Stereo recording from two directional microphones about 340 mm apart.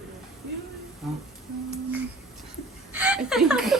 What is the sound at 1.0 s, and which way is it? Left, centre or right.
Speech, centre.